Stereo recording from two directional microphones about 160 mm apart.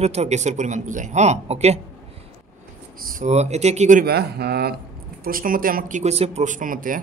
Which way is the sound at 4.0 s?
85° right.